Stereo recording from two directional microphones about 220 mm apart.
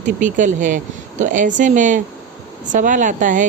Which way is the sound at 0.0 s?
35° right (ahead or behind).